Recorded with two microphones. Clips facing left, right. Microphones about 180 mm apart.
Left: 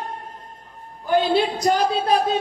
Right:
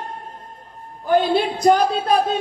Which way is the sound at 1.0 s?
55° right (ahead or behind).